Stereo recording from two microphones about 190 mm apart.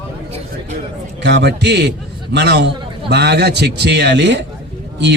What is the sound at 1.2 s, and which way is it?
A man's voice, 65° right (ahead or behind).